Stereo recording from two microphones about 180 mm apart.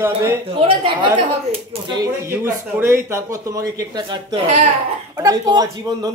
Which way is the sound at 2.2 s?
15° right (ahead or behind).